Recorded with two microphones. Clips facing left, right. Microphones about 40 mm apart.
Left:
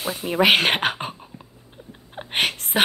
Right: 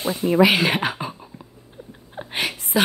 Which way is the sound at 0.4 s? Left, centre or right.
Left.